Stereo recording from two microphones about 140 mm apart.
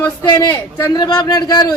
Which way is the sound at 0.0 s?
30° left (ahead or behind).